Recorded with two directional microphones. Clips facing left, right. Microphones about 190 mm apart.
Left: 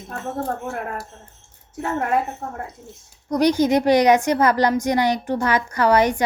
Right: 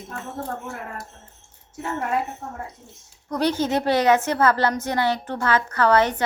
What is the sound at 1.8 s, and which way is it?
Speech, 55° left (ahead or behind).